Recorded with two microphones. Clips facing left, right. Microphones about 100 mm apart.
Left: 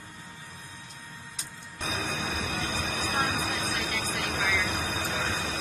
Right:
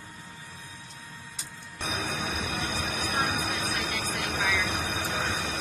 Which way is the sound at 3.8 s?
10° right (ahead or behind).